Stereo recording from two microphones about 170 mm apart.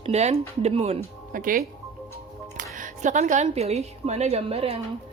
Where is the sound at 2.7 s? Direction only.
50° right (ahead or behind).